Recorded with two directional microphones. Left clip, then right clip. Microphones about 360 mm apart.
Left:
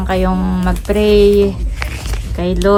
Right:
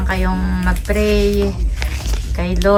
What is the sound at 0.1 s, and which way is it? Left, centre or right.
Speech, centre.